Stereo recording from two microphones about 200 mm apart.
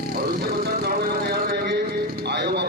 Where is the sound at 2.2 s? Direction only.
55° right (ahead or behind).